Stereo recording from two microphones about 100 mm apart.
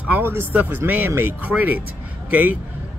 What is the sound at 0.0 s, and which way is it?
Speech, 20° right (ahead or behind).